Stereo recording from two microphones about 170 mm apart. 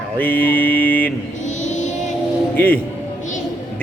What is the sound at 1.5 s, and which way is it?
Music, 45° left (ahead or behind).